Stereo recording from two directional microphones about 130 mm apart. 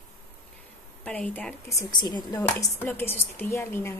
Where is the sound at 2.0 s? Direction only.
35° left (ahead or behind).